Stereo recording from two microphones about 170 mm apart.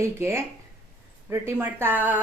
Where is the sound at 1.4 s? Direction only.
15° right (ahead or behind).